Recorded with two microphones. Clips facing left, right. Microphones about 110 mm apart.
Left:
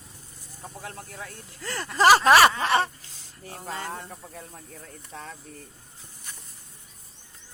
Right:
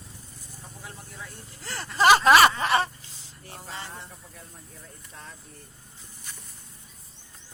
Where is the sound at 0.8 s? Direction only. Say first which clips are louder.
Left 3 dB; 90° left.